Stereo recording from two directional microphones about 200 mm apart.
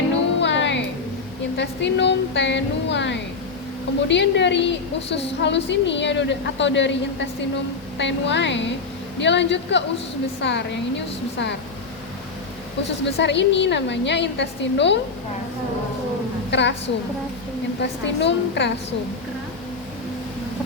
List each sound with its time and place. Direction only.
0.3 s music: 60° left (ahead or behind)
1.5 s a woman's voice: 60° left (ahead or behind)
13.1 s a woman's voice: 60° left (ahead or behind)
16.5 s a woman's voice: 60° left (ahead or behind)
17.7 s a woman's voice: 60° left (ahead or behind)